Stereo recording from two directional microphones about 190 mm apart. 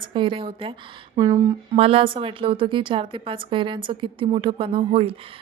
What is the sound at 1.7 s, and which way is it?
A woman's voice, 30° right (ahead or behind).